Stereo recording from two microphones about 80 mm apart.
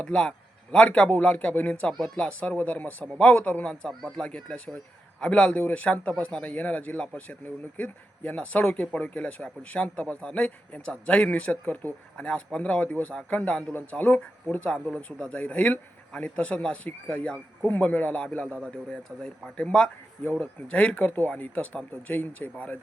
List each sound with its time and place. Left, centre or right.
0.0 s speech: centre